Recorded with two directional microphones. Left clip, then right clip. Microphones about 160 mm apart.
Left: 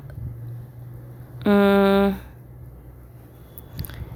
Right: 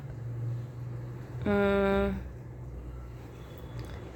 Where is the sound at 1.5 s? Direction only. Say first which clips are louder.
Left 9 dB; 65° left (ahead or behind).